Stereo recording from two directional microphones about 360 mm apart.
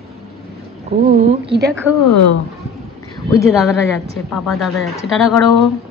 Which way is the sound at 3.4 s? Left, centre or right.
Centre.